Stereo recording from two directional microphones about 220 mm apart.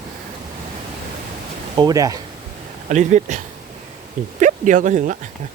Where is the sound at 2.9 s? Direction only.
35° right (ahead or behind).